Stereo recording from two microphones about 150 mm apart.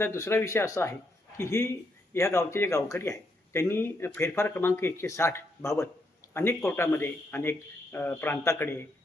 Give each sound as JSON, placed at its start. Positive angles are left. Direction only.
{"t": 0.0, "sound": "speech", "side_deg": 15}